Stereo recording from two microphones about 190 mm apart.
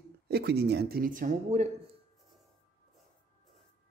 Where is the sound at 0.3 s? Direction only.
55° right (ahead or behind); by 1.7 s 40° right (ahead or behind).